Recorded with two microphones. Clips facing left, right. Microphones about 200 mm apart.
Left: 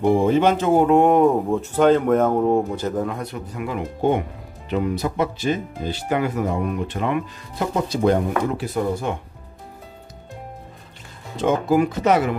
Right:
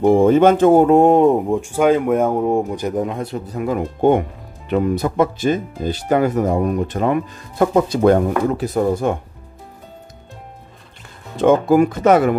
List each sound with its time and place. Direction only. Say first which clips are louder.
0.0 s speech: right 5 dB; 50° right (ahead or behind)
0.8 s speech: right 3 dB; 30° right (ahead or behind); by 8.2 s 55° right (ahead or behind)
8.5 s speech: right 5 dB; 45° right (ahead or behind)
11.3 s speech: right 6 dB; 55° right (ahead or behind)